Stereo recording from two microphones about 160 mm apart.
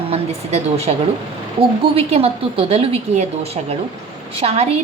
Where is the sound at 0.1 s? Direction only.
40° right (ahead or behind).